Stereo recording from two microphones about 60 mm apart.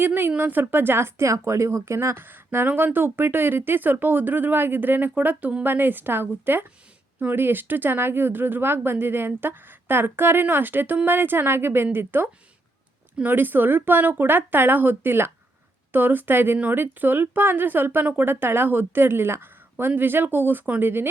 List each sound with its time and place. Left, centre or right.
0.0 s speech: right